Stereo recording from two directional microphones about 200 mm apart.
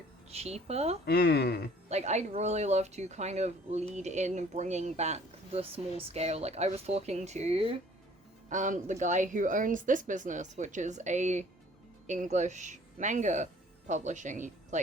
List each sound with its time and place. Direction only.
0.3 s speech: 30° right (ahead or behind)
1.0 s speech: 50° left (ahead or behind)
1.9 s speech: 35° right (ahead or behind)
8.4 s speech: 40° right (ahead or behind)